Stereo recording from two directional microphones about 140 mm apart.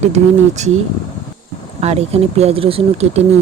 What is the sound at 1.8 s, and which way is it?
Speech, 50° right (ahead or behind).